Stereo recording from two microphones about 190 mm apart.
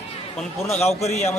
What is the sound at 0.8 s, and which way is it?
Speech, 35° left (ahead or behind).